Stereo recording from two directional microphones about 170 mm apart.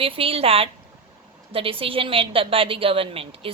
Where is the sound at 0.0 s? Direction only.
35° right (ahead or behind).